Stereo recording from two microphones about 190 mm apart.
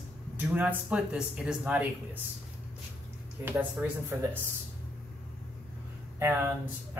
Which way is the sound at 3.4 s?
10° right (ahead or behind).